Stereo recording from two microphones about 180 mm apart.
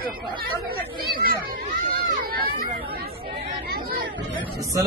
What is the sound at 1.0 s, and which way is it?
Speech, 55° right (ahead or behind).